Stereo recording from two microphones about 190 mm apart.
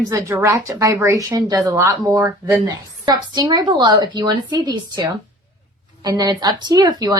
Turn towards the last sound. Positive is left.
turn(degrees=-20)  # may be behind; listen again after turning